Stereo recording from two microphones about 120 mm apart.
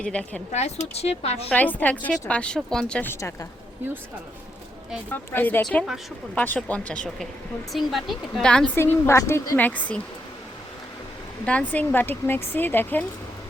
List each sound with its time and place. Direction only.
0.0 s speech: 5° left (ahead or behind)
0.5 s speech: 65° left (ahead or behind)
1.5 s speech: 15° left (ahead or behind)
3.0 s a woman's voice: 20° left (ahead or behind)
5.1 s speech: 15° left (ahead or behind)
8.7 s speech: 20° left (ahead or behind)
11.4 s speech: 10° left (ahead or behind)